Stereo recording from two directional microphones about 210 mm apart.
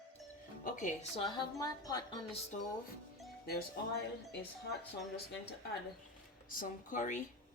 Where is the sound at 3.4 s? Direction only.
50° left (ahead or behind).